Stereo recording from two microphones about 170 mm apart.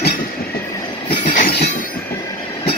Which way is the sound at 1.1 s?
45° left (ahead or behind).